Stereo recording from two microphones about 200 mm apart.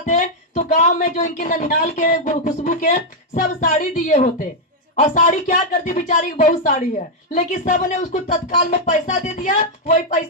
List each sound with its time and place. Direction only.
0.0 s a woman's voice: 40° left (ahead or behind)